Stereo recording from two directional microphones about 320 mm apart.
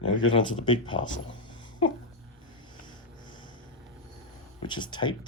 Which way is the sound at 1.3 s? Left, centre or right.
Left.